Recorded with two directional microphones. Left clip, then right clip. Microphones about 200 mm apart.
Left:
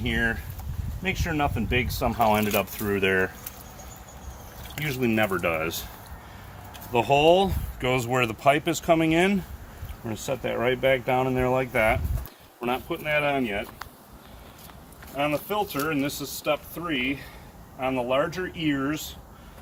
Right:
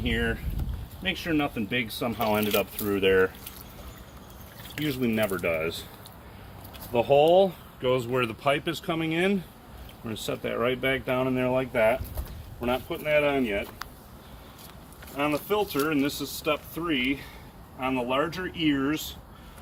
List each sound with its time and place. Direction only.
0.0 s speech: 40° left (ahead or behind)
4.9 s speech: 45° left (ahead or behind)
6.9 s speech: 45° left (ahead or behind)
10.2 s speech: 30° left (ahead or behind); by 13.6 s 45° left (ahead or behind)
15.1 s speech: 35° left (ahead or behind)